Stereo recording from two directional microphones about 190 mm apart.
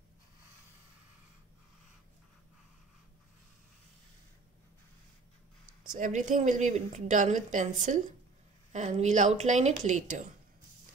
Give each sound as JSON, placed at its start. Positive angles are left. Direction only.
{"t": 5.9, "sound": "speech", "side_deg": -40}